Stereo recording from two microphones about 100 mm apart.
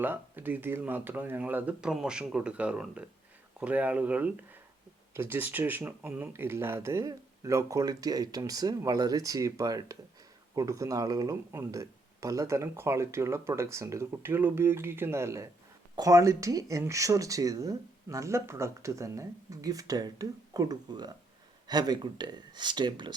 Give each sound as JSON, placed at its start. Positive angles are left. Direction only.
{"t": 0.0, "sound": "speech", "side_deg": -20}